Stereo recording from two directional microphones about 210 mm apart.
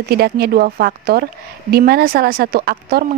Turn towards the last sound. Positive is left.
turn(degrees=-50)  # may be behind; listen again after turning